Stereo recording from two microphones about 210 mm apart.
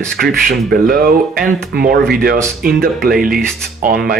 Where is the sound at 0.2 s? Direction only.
50° right (ahead or behind).